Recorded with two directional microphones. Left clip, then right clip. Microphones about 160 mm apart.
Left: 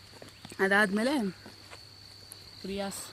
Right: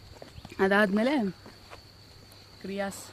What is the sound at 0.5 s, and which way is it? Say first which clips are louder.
Speech: right 1 dB; 45° right (ahead or behind).